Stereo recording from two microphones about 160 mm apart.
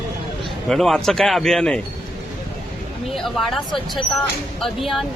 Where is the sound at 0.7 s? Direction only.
Centre (ahead or behind).